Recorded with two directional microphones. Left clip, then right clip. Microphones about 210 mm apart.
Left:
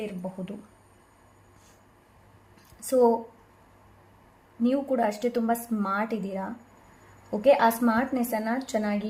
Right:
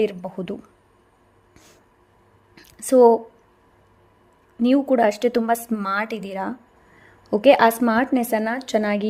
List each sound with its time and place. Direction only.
0.0 s speech: 50° right (ahead or behind)
2.6 s a sound: 45° right (ahead or behind)
4.6 s speech: 45° right (ahead or behind)